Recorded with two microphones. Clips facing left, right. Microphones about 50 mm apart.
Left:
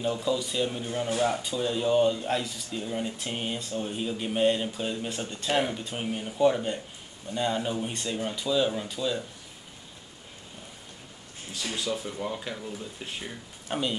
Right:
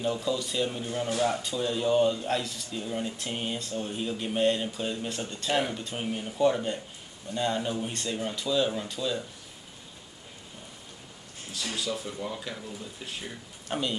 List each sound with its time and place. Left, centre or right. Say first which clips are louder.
0.0 s a man's voice: left 1 dB; centre
0.8 s speech: left 1 dB; centre
11.6 s speech: left 1 dB; left
13.7 s speech: left 1 dB; centre